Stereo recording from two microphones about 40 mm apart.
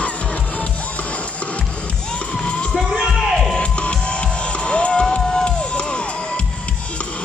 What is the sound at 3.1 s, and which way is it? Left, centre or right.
Crowd, centre.